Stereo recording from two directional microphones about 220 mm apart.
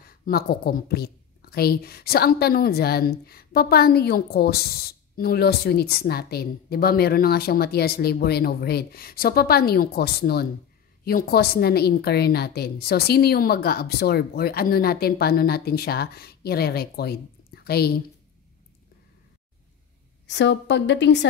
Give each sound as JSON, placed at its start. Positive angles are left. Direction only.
{"t": 0.0, "sound": "a woman's voice", "side_deg": 45}
{"t": 20.2, "sound": "a woman's voice", "side_deg": 55}